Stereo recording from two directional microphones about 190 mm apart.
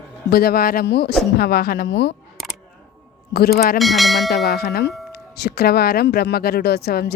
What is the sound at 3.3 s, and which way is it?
Speech, 55° left (ahead or behind).